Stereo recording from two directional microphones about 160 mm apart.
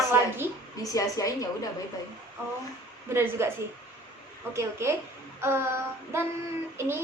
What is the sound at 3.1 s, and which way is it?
Child singing, 15° right (ahead or behind).